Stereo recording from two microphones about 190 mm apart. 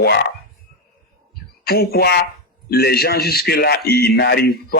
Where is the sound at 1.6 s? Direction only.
55° left (ahead or behind).